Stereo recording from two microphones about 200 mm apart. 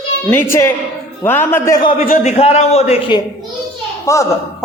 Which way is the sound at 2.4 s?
30° left (ahead or behind).